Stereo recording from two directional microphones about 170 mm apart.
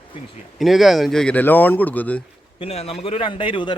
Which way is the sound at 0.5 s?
Centre (ahead or behind).